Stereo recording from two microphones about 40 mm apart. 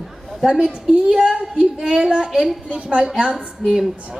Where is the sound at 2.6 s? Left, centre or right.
Right.